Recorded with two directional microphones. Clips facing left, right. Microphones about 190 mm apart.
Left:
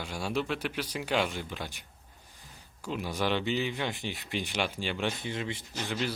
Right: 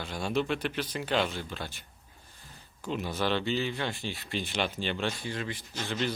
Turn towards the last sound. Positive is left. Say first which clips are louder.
# right 1 dB
turn(degrees=10)  # may be behind; listen again after turning